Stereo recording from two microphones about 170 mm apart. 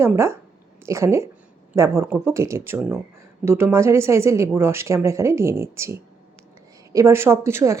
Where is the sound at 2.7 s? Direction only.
Centre (ahead or behind).